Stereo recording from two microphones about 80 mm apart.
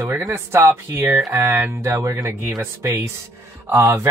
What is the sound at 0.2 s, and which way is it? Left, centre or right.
Speech, right.